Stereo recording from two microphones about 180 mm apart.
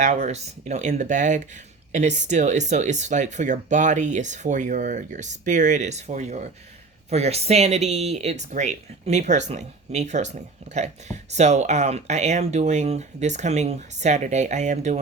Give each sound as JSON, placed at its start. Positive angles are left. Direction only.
{"t": 0.0, "sound": "speech", "side_deg": -40}